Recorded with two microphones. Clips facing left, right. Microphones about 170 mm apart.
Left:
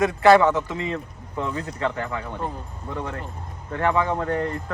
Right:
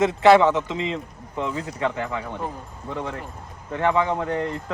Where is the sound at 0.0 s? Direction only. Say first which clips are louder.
Right 1 dB; 20° right (ahead or behind).